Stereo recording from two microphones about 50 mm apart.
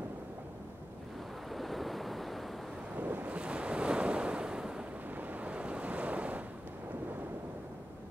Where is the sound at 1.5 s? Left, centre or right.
Centre.